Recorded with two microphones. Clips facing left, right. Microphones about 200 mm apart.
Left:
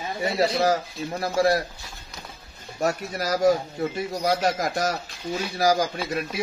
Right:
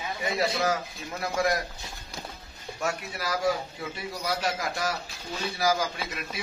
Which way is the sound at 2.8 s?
40° left (ahead or behind).